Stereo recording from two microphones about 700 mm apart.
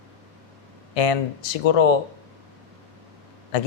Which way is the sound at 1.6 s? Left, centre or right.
Left.